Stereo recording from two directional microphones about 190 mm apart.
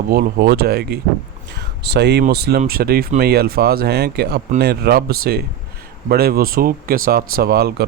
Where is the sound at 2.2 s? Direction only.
55° right (ahead or behind).